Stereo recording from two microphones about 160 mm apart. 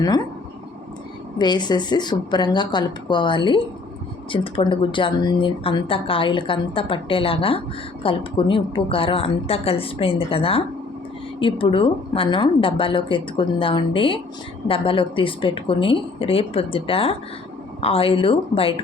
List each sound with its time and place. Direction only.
1.4 s a woman's voice: 25° left (ahead or behind)